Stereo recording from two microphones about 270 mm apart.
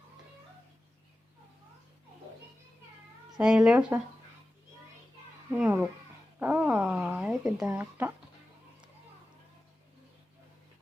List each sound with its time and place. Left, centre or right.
3.3 s speech: centre
5.5 s speech: centre